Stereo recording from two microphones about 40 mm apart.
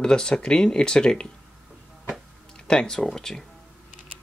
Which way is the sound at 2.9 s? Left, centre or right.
Centre.